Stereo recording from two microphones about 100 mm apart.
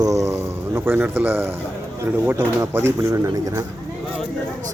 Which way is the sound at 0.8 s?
20° right (ahead or behind).